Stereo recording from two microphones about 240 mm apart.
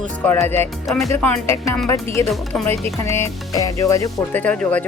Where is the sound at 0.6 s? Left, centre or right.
Centre.